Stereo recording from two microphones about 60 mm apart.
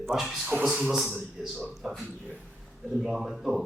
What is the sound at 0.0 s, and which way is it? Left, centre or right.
A man's voice, centre.